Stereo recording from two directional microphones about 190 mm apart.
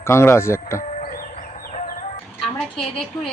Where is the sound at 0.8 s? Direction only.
40° left (ahead or behind).